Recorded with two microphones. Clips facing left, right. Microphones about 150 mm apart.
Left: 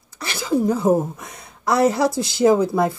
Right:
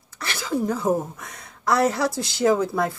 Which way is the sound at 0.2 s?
15° left (ahead or behind).